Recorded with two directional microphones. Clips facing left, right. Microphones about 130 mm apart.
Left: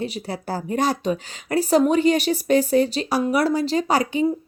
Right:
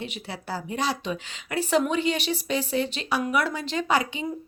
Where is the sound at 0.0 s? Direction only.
40° left (ahead or behind).